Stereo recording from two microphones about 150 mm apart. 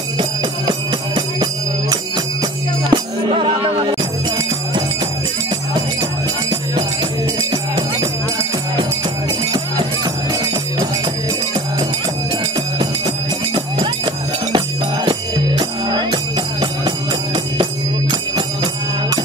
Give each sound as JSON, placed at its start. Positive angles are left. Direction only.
{"t": 0.2, "sound": "music", "side_deg": -30}
{"t": 15.0, "sound": "music", "side_deg": -30}
{"t": 18.3, "sound": "music", "side_deg": -25}